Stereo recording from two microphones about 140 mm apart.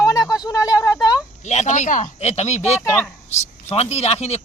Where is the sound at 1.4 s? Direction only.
55° left (ahead or behind).